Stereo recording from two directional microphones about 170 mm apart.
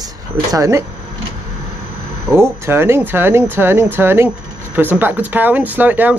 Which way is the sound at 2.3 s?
15° right (ahead or behind).